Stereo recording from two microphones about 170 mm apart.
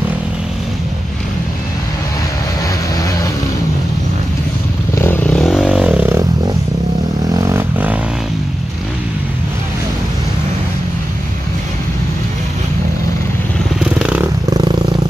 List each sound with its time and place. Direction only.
4.9 s vehicle: 15° left (ahead or behind); by 6.2 s 10° right (ahead or behind)
7.3 s vehicle: 15° right (ahead or behind)
13.9 s motorcycle: 5° right (ahead or behind)
14.5 s a sound: 25° right (ahead or behind)